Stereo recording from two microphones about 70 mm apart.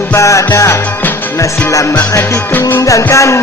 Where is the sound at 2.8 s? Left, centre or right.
Left.